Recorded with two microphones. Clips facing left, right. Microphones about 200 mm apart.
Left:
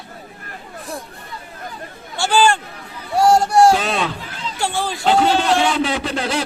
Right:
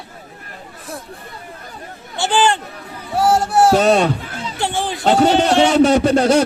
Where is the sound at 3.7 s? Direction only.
45° right (ahead or behind).